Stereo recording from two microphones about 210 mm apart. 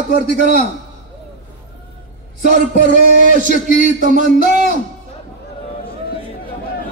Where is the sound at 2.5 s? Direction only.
40° right (ahead or behind).